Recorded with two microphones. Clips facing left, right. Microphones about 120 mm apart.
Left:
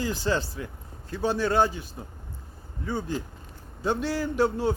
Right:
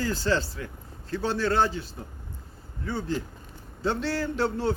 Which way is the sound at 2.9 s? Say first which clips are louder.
Even; 15° left (ahead or behind).